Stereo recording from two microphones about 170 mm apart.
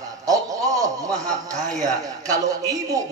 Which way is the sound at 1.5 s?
20° right (ahead or behind).